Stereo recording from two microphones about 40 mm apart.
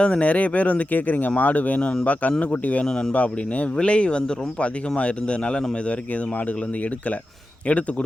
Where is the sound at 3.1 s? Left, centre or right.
Left.